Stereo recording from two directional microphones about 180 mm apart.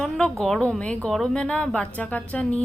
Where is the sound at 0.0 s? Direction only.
Centre (ahead or behind).